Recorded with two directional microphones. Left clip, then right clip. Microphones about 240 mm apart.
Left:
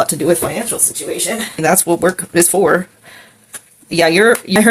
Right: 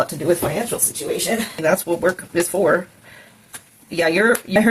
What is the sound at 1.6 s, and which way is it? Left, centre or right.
Speech, left.